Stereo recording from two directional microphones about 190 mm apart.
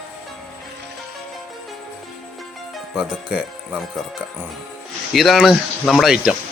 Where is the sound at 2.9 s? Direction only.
5° right (ahead or behind).